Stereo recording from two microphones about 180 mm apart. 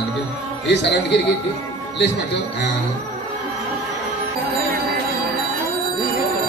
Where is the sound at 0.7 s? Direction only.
70° left (ahead or behind).